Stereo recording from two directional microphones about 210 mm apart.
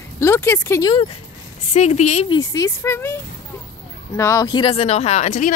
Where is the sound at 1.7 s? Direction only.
35° left (ahead or behind).